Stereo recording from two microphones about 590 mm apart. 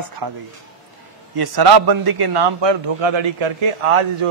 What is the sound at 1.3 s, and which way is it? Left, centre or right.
A man's voice, right.